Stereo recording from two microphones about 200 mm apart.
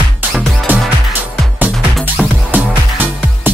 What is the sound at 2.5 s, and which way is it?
Music, 10° right (ahead or behind).